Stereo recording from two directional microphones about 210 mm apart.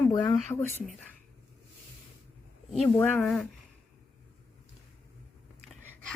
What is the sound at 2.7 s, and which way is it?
Speech, 5° left (ahead or behind).